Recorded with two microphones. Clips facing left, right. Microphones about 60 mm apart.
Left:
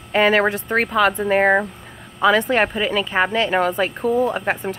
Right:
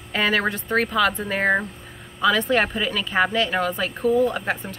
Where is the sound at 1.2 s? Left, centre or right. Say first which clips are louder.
Left 5 dB; left.